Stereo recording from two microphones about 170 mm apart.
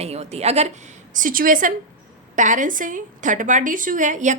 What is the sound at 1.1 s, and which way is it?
A woman's voice, 55° right (ahead or behind).